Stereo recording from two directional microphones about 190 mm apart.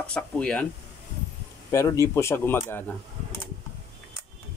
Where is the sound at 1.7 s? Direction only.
15° left (ahead or behind).